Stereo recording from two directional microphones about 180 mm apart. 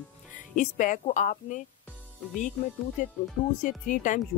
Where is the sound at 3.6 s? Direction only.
45° left (ahead or behind).